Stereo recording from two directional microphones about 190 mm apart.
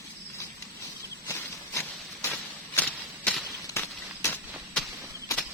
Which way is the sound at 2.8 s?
5° left (ahead or behind).